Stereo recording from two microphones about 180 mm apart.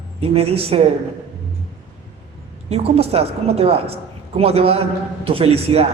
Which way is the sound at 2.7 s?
35° right (ahead or behind).